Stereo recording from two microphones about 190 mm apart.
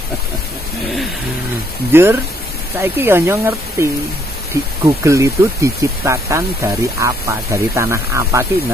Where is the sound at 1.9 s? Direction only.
10° right (ahead or behind).